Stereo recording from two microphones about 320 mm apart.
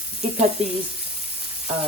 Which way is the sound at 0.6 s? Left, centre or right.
Centre.